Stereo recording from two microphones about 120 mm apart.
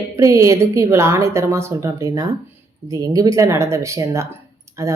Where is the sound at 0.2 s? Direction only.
25° right (ahead or behind).